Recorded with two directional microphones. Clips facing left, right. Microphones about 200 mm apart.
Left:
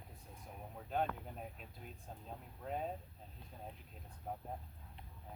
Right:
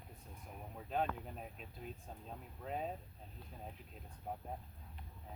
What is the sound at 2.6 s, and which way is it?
Speech, centre (ahead or behind).